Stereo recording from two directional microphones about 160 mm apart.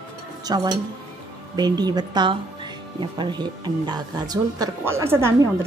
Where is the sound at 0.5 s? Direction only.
25° right (ahead or behind).